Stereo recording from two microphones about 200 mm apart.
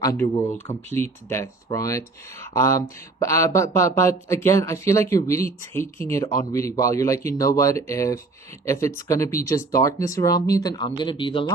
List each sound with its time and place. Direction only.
0.0 s speech: 15° left (ahead or behind)